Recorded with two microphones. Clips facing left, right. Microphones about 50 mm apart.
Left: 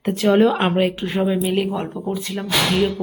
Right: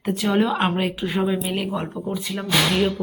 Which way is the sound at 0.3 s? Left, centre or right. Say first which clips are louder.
Left 5 dB; centre.